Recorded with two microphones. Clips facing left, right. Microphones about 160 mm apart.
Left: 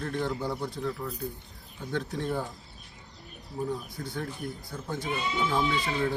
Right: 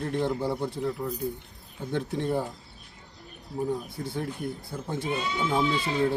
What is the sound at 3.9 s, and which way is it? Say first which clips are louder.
Speech: right 3 dB; 25° right (ahead or behind).